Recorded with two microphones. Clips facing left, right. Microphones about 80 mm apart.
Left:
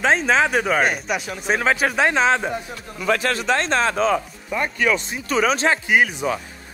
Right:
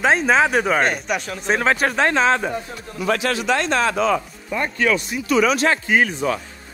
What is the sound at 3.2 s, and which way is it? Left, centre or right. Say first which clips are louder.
Speech: right 1 dB; left.